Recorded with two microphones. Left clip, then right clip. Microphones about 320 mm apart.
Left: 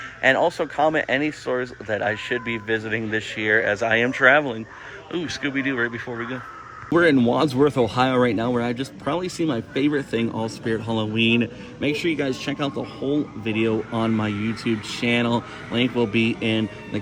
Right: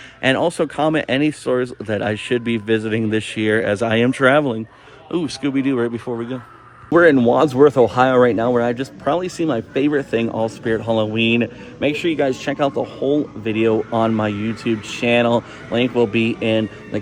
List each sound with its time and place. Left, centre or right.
0.2 s speech: right
6.9 s speech: centre